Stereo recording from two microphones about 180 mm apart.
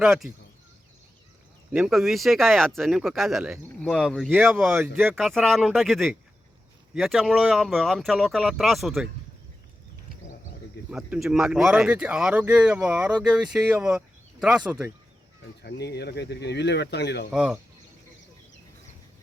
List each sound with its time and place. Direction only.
0.0 s speech: 5° right (ahead or behind)
1.7 s speech: centre (ahead or behind)
10.9 s speech: 5° right (ahead or behind)
15.6 s speech: 65° left (ahead or behind)
17.3 s speech: 5° right (ahead or behind)